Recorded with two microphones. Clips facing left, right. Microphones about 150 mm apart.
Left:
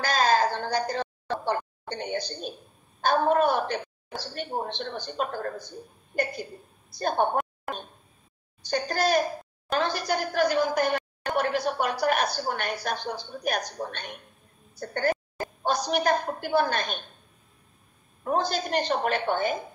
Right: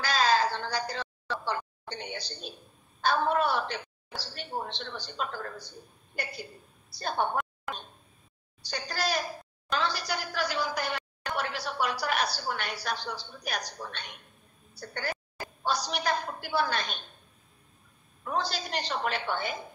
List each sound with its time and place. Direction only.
0.0 s a sound: 50° left (ahead or behind)
3.0 s a child's voice: 50° left (ahead or behind)
8.6 s a child's voice: 50° left (ahead or behind)
18.2 s a child's voice: 50° left (ahead or behind)